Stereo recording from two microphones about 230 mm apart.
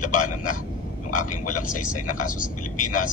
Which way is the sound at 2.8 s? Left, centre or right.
Left.